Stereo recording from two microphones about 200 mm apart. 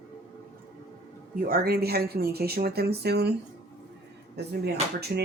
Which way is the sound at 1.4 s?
45° right (ahead or behind).